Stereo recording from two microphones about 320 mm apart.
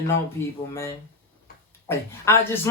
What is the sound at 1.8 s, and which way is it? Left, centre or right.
Speech, centre.